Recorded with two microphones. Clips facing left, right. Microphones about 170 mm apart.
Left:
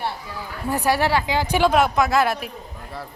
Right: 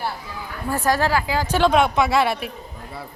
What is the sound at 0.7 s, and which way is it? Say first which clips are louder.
Speech: even; 15° left (ahead or behind).